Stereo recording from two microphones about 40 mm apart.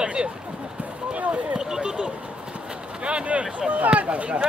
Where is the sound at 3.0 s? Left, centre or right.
Right.